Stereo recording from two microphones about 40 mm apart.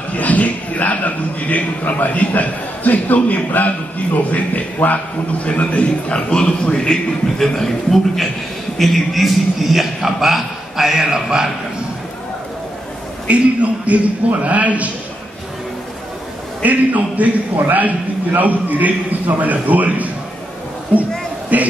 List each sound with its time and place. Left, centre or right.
0.1 s a man's voice: left; by 11.4 s centre
13.3 s a man's voice: right
16.6 s a man's voice: right
21.5 s a man's voice: right